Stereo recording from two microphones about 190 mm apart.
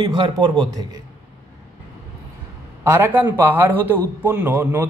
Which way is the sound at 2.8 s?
15° right (ahead or behind).